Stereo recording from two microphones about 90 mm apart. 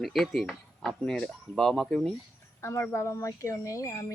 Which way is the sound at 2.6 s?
30° left (ahead or behind).